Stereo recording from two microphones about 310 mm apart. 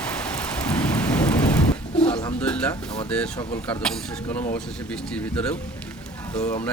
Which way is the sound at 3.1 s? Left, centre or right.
Centre.